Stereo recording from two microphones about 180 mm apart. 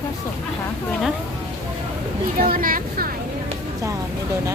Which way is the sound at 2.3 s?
50° right (ahead or behind).